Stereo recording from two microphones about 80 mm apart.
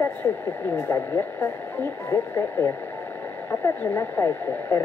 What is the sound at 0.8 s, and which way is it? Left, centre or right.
Speech, left.